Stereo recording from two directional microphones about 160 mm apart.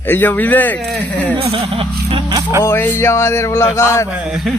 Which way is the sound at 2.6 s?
15° left (ahead or behind).